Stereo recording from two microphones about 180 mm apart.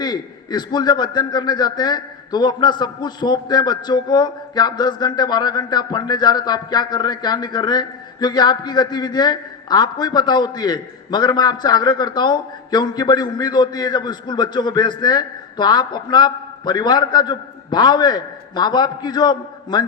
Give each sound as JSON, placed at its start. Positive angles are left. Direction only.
{"t": 0.0, "sound": "a man's voice", "side_deg": 25}